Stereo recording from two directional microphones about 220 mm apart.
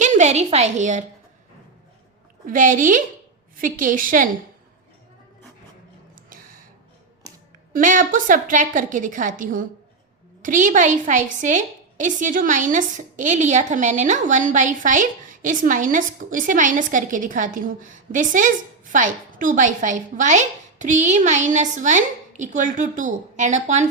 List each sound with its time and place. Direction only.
0.0 s a woman's voice: 35° right (ahead or behind)
2.5 s a woman's voice: 35° right (ahead or behind)
7.7 s a woman's voice: 35° right (ahead or behind)